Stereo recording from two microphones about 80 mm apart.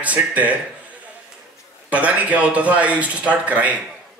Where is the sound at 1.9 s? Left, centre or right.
Centre.